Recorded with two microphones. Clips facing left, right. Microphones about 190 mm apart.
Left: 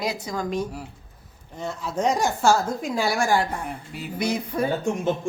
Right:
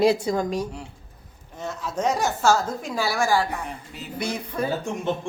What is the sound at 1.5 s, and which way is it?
A woman's voice, 15° left (ahead or behind).